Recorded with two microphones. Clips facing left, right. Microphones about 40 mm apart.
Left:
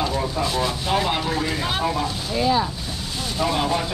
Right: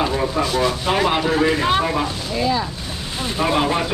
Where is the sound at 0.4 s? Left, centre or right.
Centre.